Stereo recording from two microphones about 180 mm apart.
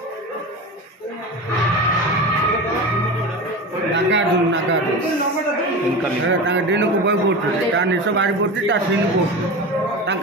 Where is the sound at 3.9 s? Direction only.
85° right.